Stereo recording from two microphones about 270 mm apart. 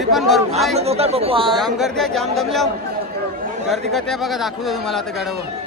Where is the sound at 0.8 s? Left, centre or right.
Right.